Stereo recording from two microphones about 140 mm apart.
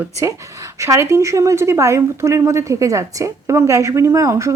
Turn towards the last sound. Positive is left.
turn(degrees=-20)  # may be behind; listen again after turning